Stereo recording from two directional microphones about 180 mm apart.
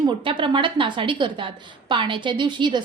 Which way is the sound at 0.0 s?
25° right (ahead or behind).